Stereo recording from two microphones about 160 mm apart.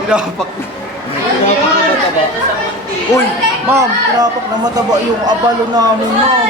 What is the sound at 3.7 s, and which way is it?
Speech, 20° right (ahead or behind).